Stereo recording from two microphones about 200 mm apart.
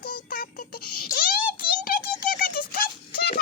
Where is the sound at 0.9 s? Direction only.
50° left (ahead or behind).